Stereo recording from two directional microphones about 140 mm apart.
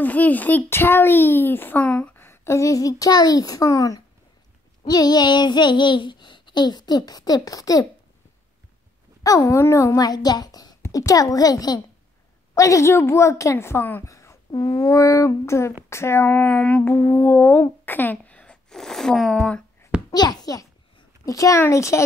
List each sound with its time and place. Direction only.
0.0 s a child's voice: 10° left (ahead or behind)
9.2 s a woman's voice: 25° left (ahead or behind)
16.3 s a child's voice: 10° left (ahead or behind)
20.1 s a child's voice: 30° left (ahead or behind)